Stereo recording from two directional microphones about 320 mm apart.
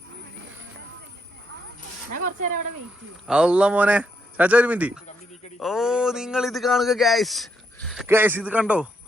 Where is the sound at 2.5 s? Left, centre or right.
Right.